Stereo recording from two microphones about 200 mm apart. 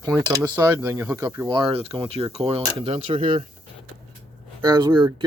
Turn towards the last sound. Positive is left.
turn(degrees=-20)  # may be behind; listen again after turning